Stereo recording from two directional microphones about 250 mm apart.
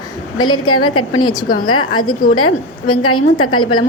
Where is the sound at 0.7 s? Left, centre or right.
Left.